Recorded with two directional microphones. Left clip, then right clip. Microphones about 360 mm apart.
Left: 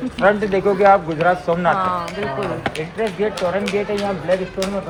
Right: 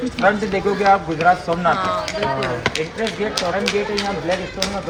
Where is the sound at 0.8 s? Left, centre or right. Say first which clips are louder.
Left 1 dB; left.